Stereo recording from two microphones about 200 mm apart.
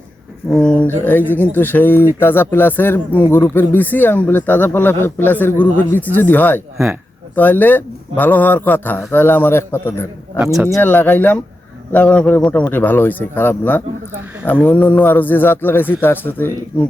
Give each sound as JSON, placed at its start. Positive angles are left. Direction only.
{"t": 0.5, "sound": "speech", "side_deg": 5}
{"t": 10.3, "sound": "speech", "side_deg": -5}
{"t": 10.7, "sound": "speech", "side_deg": 10}